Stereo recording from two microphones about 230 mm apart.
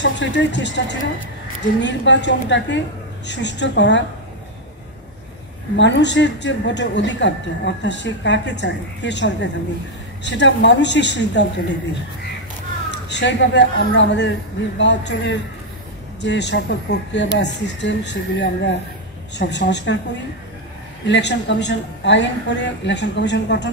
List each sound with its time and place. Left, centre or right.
0.0 s a woman's voice: left
5.8 s a woman's voice: left
13.1 s a woman's voice: left
21.1 s a woman's voice: left